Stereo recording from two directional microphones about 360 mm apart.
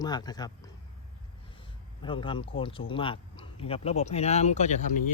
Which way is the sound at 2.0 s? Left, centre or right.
Centre.